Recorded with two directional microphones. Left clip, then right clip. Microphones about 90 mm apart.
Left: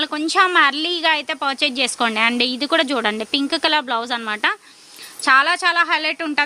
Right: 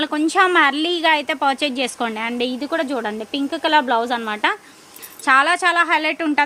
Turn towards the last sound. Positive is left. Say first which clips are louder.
# right 1 dB
turn(degrees=10)  # may be behind; listen again after turning